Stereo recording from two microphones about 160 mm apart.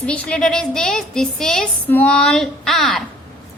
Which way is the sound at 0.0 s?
5° left (ahead or behind).